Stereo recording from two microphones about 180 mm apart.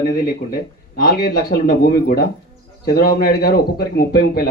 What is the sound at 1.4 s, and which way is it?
A man's voice, 55° left (ahead or behind).